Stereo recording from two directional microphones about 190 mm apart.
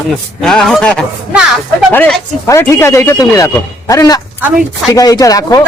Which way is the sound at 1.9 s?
5° left (ahead or behind).